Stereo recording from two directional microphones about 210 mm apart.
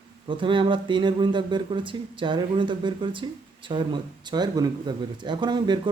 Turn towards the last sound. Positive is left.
turn(degrees=-20)  # may be behind; listen again after turning